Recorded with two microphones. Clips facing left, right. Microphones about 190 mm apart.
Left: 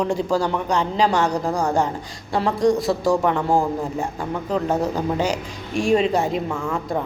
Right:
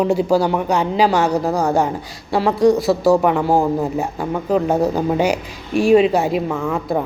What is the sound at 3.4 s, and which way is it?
Speech, 35° right (ahead or behind).